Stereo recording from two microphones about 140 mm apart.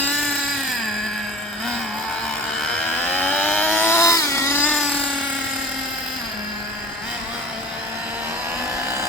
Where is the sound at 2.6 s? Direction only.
5° left (ahead or behind).